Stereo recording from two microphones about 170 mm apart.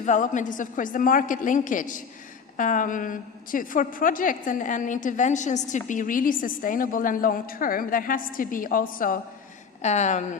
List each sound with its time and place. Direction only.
0.0 s a woman's voice: 45° left (ahead or behind)
9.8 s a woman's voice: 40° left (ahead or behind)